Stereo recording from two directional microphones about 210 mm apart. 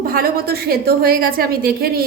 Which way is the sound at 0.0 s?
45° right (ahead or behind).